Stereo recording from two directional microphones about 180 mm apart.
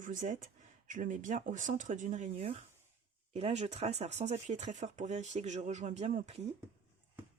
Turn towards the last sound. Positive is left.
turn(degrees=-35)  # may be behind; listen again after turning